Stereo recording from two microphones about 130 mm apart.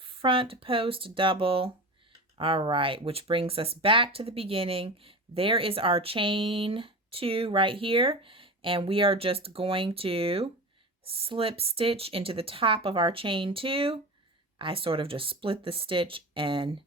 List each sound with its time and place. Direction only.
0.0 s speech: 40° right (ahead or behind)